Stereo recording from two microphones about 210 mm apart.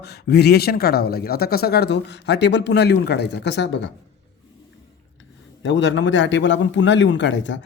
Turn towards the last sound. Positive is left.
turn(degrees=60)  # may be behind; listen again after turning